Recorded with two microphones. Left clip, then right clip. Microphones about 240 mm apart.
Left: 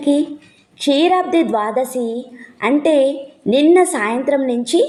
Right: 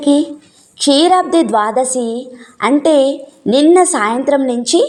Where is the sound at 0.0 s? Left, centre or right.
Centre.